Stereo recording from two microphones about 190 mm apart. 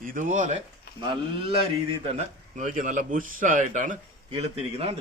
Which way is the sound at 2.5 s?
45° right (ahead or behind).